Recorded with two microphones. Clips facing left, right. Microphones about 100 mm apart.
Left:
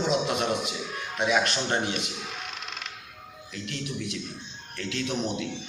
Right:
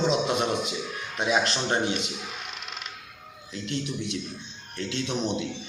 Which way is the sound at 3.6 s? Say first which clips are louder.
Right 3 dB; 30° right (ahead or behind).